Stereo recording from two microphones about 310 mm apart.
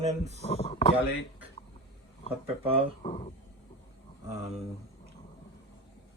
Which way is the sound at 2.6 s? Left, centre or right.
Centre.